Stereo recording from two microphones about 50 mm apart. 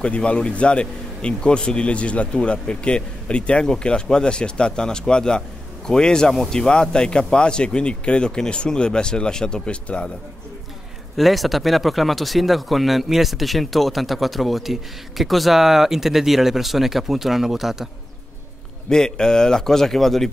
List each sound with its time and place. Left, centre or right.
0.0 s speech: left
11.1 s speech: centre
18.9 s speech: centre